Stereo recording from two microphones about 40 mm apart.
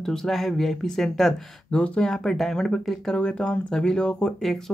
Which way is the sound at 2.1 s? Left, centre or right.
Centre.